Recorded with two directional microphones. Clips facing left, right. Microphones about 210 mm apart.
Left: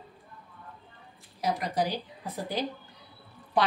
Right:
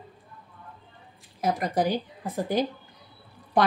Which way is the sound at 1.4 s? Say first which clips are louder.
Right 4 dB; 50° right (ahead or behind).